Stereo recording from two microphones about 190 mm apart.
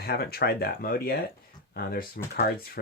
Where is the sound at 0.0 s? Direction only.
55° left (ahead or behind).